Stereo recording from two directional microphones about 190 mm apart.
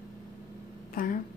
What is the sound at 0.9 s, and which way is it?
Speech, 45° left (ahead or behind).